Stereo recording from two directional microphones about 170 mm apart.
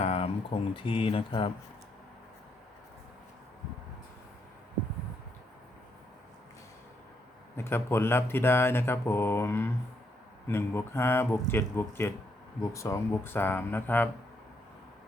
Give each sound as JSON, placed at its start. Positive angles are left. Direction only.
{"t": 0.0, "sound": "speech", "side_deg": 35}
{"t": 7.5, "sound": "speech", "side_deg": 15}